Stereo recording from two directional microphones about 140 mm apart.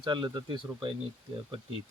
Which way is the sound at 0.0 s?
30° right (ahead or behind).